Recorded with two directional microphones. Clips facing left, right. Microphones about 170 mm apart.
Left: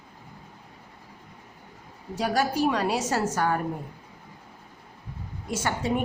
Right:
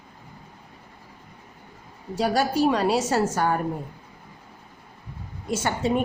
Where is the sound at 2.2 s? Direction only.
30° right (ahead or behind).